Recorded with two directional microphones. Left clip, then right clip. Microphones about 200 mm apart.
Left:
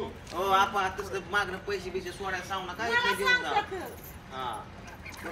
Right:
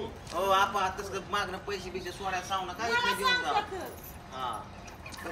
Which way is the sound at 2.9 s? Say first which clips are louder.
Left 2 dB; 55° right (ahead or behind).